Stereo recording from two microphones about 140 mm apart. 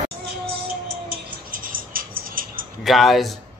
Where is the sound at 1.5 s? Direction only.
85° right.